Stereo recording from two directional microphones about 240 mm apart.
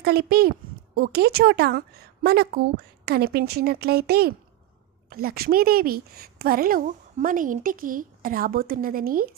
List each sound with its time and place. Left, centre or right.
0.0 s a woman's voice: right